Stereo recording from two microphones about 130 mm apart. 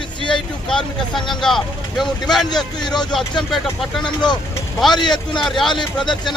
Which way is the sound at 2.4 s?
30° left (ahead or behind).